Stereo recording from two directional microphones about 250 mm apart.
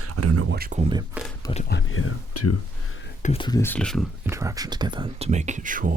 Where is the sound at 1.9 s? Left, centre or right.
Left.